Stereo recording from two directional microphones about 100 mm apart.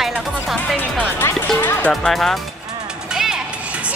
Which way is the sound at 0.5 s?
Centre (ahead or behind).